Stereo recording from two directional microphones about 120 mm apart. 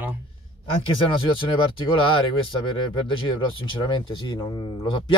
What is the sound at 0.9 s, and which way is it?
Speech, 45° left (ahead or behind).